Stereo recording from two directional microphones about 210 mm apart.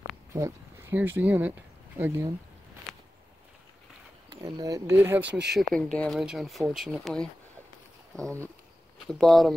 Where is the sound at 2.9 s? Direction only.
Centre (ahead or behind).